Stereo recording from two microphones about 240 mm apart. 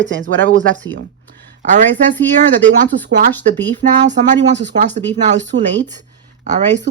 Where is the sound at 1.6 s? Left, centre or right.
Right.